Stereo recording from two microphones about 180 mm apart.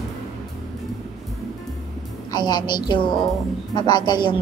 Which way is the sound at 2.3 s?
25° left (ahead or behind).